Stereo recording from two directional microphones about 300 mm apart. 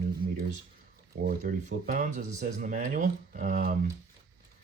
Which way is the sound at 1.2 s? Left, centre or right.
Right.